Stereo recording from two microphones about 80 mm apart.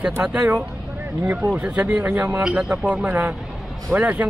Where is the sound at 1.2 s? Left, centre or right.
Centre.